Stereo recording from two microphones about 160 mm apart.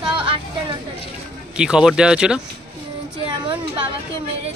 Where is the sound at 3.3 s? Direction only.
30° right (ahead or behind).